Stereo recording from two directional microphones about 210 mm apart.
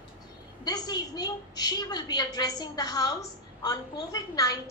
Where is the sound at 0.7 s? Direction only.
20° left (ahead or behind).